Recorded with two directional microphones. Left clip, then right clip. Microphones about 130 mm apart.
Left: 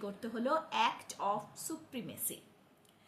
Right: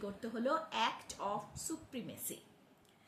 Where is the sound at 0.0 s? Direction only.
20° left (ahead or behind).